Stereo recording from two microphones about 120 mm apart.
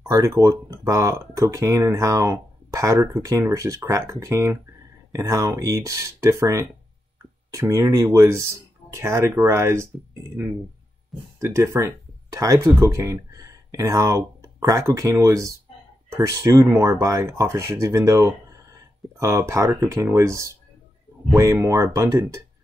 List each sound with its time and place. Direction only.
0.1 s speech: 25° right (ahead or behind)
11.3 s speech: 25° right (ahead or behind)